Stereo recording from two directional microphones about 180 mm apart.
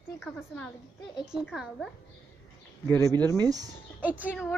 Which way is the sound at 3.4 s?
20° right (ahead or behind).